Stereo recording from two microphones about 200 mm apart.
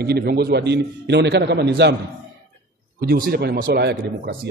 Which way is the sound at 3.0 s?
50° right (ahead or behind).